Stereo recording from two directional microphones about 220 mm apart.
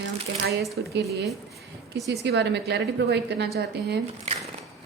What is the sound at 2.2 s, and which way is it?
A woman's voice, 50° right (ahead or behind).